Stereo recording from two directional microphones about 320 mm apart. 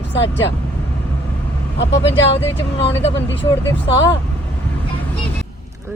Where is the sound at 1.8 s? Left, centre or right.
Left.